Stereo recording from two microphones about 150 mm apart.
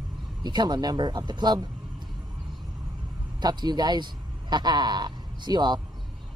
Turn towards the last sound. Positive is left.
turn(degrees=-30)  # may be behind; listen again after turning